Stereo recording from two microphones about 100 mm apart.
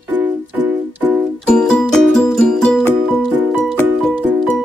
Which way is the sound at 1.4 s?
5° left (ahead or behind).